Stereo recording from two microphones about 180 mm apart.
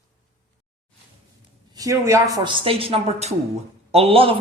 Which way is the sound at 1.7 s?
20° right (ahead or behind).